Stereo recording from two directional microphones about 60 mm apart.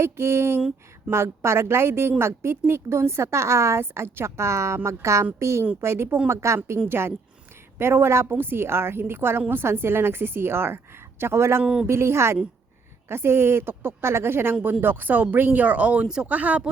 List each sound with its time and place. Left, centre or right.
0.0 s a woman's voice: right
6.8 s a woman's voice: right
11.6 s speech: centre
11.9 s a woman's voice: right